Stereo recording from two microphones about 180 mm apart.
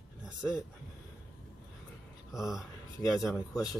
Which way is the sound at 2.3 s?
Centre (ahead or behind).